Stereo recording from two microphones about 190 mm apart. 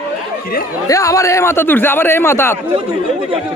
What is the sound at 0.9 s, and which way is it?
A man's voice, 15° left (ahead or behind).